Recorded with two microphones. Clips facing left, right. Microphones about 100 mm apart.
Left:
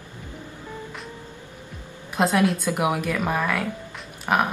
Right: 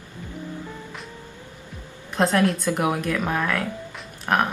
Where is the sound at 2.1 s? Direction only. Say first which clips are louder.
Even; 5° left (ahead or behind).